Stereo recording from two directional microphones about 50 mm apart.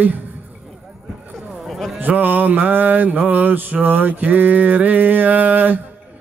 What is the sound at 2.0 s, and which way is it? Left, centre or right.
Speech, right.